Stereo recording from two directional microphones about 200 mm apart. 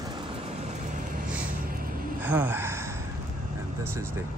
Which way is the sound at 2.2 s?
10° right (ahead or behind).